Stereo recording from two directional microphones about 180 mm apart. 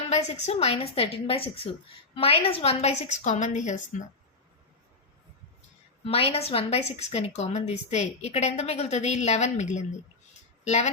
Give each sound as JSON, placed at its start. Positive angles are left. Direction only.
{"t": 0.1, "sound": "a woman's voice", "side_deg": 40}
{"t": 6.1, "sound": "a woman's voice", "side_deg": 30}